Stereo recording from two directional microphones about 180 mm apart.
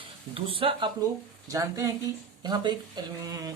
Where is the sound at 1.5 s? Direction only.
15° right (ahead or behind).